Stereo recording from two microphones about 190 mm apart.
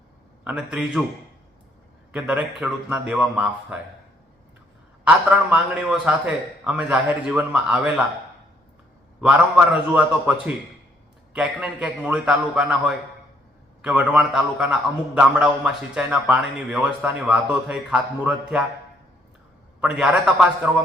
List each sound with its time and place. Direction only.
0.4 s a man's voice: 5° right (ahead or behind)
2.1 s a man's voice: 5° right (ahead or behind)
5.0 s a man's voice: 5° right (ahead or behind)
9.2 s a man's voice: 5° right (ahead or behind)
19.8 s a man's voice: 5° right (ahead or behind)